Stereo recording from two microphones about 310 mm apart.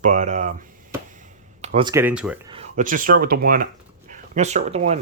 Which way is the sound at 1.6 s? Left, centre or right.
Centre.